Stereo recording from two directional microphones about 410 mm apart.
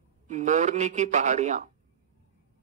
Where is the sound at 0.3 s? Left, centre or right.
Centre.